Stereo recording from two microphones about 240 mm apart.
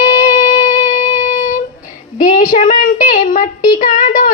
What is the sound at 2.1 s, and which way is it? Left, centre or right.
Speech, left.